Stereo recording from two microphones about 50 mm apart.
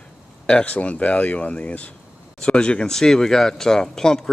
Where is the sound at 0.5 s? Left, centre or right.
Left.